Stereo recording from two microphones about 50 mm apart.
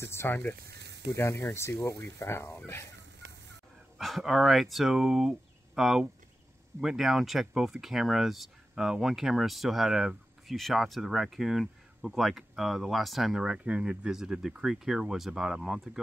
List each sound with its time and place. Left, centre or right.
0.0 s speech: left
1.1 s speech: left
2.1 s speech: left
4.0 s speech: centre
10.5 s speech: centre
13.5 s speech: right
14.1 s speech: centre